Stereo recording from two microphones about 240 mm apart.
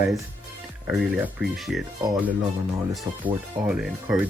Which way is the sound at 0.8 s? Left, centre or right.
Centre.